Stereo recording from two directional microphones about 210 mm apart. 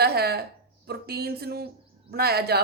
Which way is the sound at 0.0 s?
50° right (ahead or behind).